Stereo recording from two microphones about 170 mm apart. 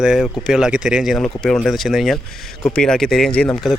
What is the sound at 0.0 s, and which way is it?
Speech, 5° right (ahead or behind).